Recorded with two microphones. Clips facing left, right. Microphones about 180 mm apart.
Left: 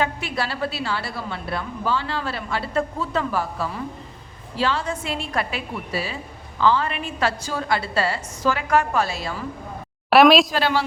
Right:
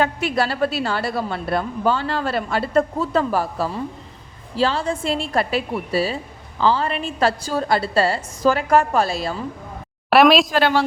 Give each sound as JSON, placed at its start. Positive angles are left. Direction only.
{"t": 0.0, "sound": "a woman's voice", "side_deg": -45}
{"t": 10.1, "sound": "a woman's voice", "side_deg": 0}
{"t": 10.5, "sound": "speech", "side_deg": -55}